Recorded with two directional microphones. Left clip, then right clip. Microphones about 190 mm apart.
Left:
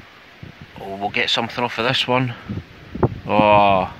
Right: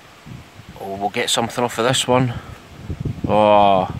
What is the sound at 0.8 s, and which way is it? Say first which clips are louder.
Speech: even; 10° right (ahead or behind).